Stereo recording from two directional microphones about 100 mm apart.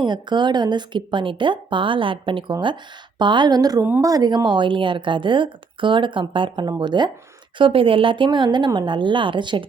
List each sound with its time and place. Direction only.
0.0 s a woman's voice: 50° right (ahead or behind)
7.6 s speech: 65° right (ahead or behind)